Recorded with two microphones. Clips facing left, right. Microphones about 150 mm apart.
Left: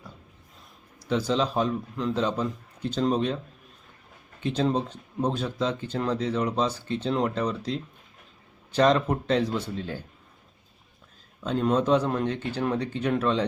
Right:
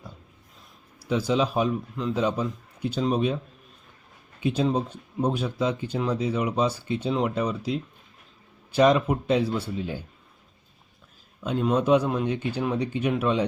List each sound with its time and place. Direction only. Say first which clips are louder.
1.0 s speech: right 1 dB; 10° right (ahead or behind)
11.6 s speech: right 2 dB; 10° right (ahead or behind)